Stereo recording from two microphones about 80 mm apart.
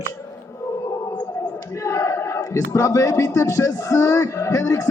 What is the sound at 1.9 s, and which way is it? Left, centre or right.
Speech, left.